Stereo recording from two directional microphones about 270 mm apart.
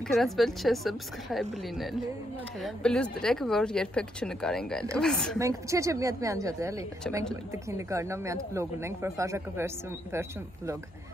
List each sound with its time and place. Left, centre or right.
0.1 s speech: centre
5.4 s speech: centre